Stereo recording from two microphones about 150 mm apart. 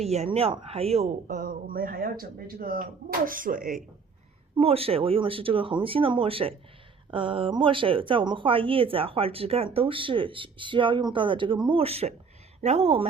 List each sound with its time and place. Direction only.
0.0 s speech: 45° right (ahead or behind); by 3.6 s 65° right (ahead or behind)
3.6 s speech: centre (ahead or behind)
4.5 s a woman's voice: 40° right (ahead or behind)